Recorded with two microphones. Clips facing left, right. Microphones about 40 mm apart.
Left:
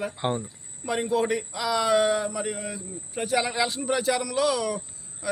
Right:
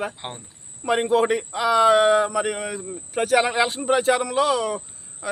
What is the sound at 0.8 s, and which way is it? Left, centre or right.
A man's voice, right.